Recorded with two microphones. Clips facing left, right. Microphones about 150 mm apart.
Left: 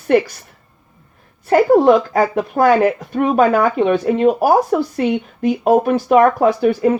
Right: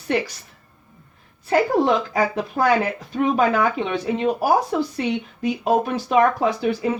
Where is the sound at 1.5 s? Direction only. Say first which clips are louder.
Left 7 dB; 50° left (ahead or behind).